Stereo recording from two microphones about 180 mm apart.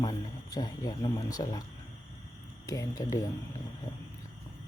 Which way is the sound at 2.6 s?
20° left (ahead or behind).